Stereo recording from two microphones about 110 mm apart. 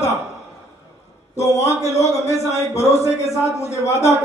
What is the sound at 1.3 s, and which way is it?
A man's voice, 25° left (ahead or behind).